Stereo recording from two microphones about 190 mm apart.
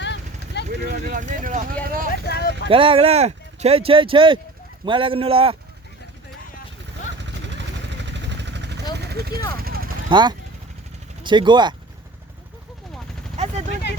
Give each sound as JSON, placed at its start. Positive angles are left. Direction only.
{"t": 0.0, "sound": "vehicle", "side_deg": 65}
{"t": 0.7, "sound": "speech", "side_deg": -60}
{"t": 1.1, "sound": "speech", "side_deg": -45}
{"t": 2.2, "sound": "vehicle", "side_deg": 55}
{"t": 2.6, "sound": "speech", "side_deg": -30}
{"t": 7.2, "sound": "vehicle", "side_deg": -70}
{"t": 10.1, "sound": "speech", "side_deg": -25}